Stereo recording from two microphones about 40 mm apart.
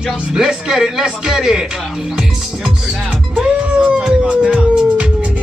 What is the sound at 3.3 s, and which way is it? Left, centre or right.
Music, right.